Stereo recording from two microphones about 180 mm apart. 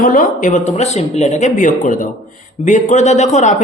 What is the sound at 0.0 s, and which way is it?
Speech, 50° left (ahead or behind).